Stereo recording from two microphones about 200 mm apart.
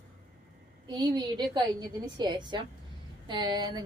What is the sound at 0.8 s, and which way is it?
Speech, 20° right (ahead or behind).